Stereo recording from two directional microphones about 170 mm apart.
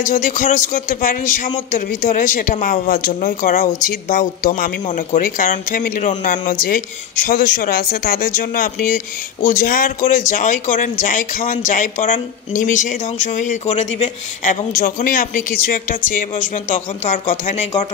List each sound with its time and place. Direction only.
0.0 s speech: 55° left (ahead or behind)
14.8 s speech: 55° left (ahead or behind)